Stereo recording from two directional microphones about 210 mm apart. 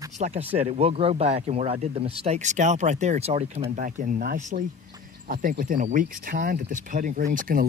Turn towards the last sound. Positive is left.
turn(degrees=-40)  # may be behind; listen again after turning